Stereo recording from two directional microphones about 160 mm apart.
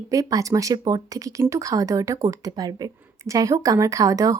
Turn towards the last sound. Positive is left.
turn(degrees=-20)  # may be behind; listen again after turning